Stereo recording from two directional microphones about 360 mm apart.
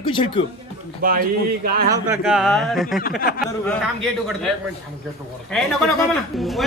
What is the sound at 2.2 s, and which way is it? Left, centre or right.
Speech, centre.